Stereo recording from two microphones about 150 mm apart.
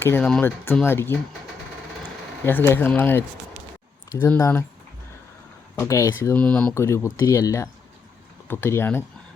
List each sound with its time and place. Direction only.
0.0 s speech: 10° left (ahead or behind)
2.4 s speech: 15° left (ahead or behind)
4.3 s speech: 15° left (ahead or behind)
5.7 s speech: 20° left (ahead or behind)
6.3 s speech: 10° left (ahead or behind)